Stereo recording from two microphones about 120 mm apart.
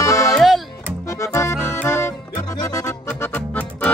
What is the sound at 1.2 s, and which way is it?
Accordion, 25° left (ahead or behind).